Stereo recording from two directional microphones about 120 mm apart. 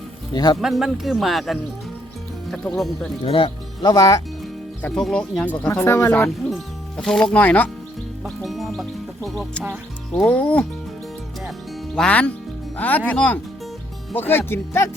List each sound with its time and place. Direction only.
0.3 s speech: 35° left (ahead or behind)
0.6 s speech: centre (ahead or behind)
3.2 s speech: 45° left (ahead or behind)
4.8 s speech: 5° left (ahead or behind)
5.8 s speech: 25° left (ahead or behind)
6.9 s speech: 5° left (ahead or behind)
8.2 s speech: centre (ahead or behind)
10.1 s speech: 10° left (ahead or behind)
11.9 s speech: 10° left (ahead or behind)